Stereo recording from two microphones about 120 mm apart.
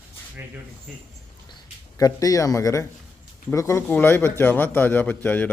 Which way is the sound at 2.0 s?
30° left (ahead or behind).